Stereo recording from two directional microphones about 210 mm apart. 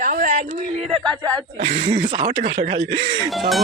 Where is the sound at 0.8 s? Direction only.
5° left (ahead or behind).